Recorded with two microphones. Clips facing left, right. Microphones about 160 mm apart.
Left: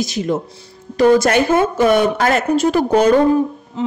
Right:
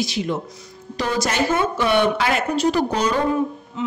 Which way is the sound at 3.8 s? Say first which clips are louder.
Left 5 dB; 35° left (ahead or behind).